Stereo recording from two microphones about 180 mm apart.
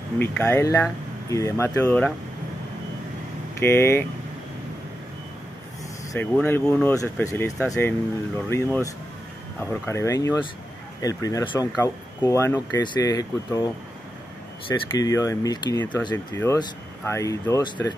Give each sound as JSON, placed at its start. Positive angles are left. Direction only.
{"t": 0.2, "sound": "speech", "side_deg": 10}
{"t": 3.5, "sound": "speech", "side_deg": 15}
{"t": 6.1, "sound": "speech", "side_deg": 10}
{"t": 14.7, "sound": "speech", "side_deg": 20}